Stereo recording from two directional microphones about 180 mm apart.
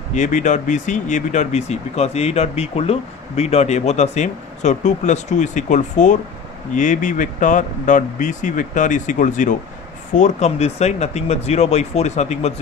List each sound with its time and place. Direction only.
0.1 s speech: 45° left (ahead or behind)